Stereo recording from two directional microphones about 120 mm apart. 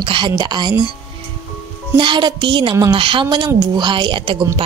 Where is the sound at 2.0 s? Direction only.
40° right (ahead or behind).